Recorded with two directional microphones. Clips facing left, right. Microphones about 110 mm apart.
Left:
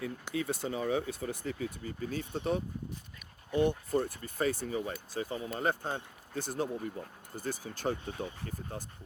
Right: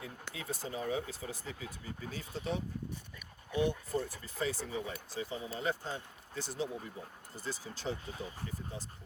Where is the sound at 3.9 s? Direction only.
60° left (ahead or behind).